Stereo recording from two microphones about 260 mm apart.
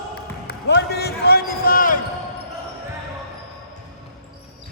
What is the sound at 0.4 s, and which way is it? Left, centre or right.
Basketball bounce, left.